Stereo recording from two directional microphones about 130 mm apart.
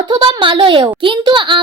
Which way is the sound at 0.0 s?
40° right (ahead or behind).